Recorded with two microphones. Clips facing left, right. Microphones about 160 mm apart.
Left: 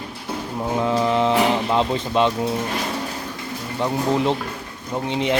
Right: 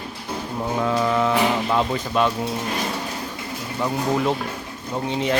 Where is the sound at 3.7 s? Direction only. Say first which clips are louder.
Left 2 dB; 20° left (ahead or behind).